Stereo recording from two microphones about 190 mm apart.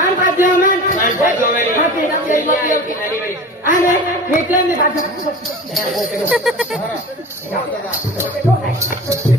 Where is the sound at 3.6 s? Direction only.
45° left (ahead or behind).